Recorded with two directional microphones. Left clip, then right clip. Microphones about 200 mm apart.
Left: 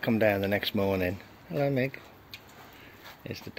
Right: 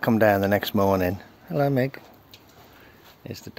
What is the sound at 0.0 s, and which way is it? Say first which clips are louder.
Speech: right 6 dB; 30° right (ahead or behind).